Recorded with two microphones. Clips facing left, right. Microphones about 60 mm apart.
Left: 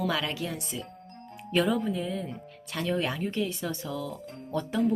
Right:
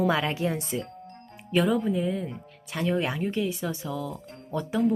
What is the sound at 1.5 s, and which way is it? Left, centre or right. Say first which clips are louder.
Speech: right 2 dB; centre.